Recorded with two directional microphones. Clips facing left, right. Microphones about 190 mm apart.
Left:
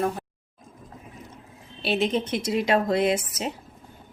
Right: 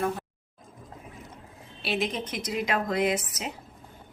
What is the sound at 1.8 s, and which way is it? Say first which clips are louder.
A woman's voice: left 5 dB; 30° left (ahead or behind).